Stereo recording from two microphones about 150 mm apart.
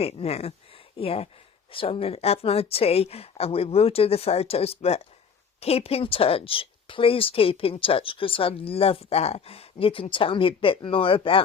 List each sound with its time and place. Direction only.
0.0 s speech: 40° left (ahead or behind)